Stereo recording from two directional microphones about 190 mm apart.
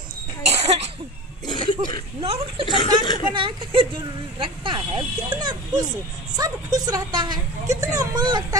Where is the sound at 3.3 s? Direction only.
25° right (ahead or behind).